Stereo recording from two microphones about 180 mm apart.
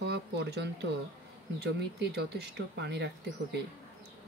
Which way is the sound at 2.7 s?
70° right (ahead or behind).